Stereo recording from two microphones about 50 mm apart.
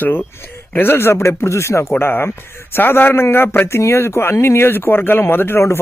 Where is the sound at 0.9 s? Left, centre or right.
Left.